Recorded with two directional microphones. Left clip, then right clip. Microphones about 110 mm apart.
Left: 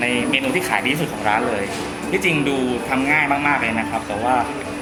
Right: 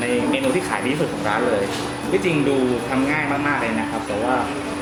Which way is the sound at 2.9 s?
15° left (ahead or behind).